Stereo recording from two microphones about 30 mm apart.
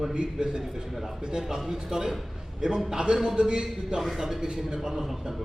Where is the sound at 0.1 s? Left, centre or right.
Right.